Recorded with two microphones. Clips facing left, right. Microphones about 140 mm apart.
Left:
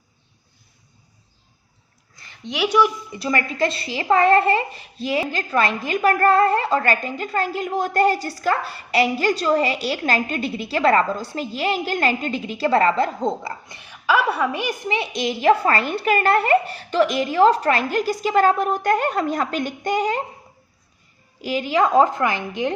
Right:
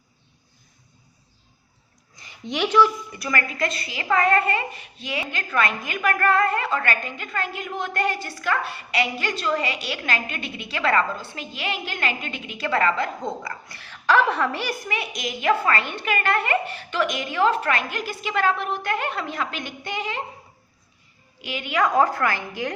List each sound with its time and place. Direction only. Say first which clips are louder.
2.1 s a sound: even; 15° right (ahead or behind)
2.4 s speech: left 1 dB; centre (ahead or behind)
2.6 s speech: even; 15° left (ahead or behind)
3.2 s a woman's voice: left 5 dB; 25° left (ahead or behind); by 20.2 s 40° left (ahead or behind)
21.4 s a woman's voice: left 4 dB; 35° left (ahead or behind)